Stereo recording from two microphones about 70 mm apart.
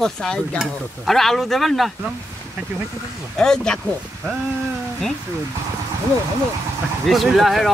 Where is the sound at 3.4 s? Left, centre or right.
Centre.